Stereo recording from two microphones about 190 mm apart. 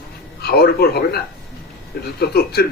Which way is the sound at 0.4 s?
55° left (ahead or behind).